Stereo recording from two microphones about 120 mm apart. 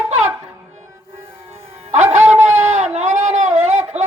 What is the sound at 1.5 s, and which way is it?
Music, 60° right (ahead or behind).